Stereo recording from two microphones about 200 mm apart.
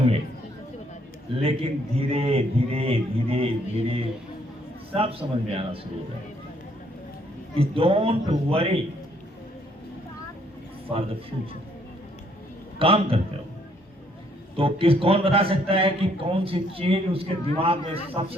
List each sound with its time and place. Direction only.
1.4 s a man's voice: 30° right (ahead or behind)
4.9 s a man's voice: 30° right (ahead or behind)
7.5 s a man's voice: 30° right (ahead or behind)
10.9 s a man's voice: 30° right (ahead or behind)
12.8 s a man's voice: 25° right (ahead or behind)
14.5 s a man's voice: 25° right (ahead or behind)